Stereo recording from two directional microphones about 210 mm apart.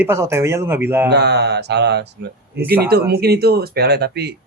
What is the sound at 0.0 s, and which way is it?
Speech, 10° right (ahead or behind).